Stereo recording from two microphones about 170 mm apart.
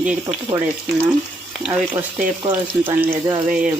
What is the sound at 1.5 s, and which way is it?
Speech, 5° right (ahead or behind).